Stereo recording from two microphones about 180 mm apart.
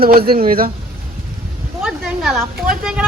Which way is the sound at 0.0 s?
55° right (ahead or behind).